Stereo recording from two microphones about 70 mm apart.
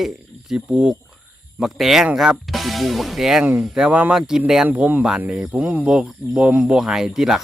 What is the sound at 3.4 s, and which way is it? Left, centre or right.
Speech, right.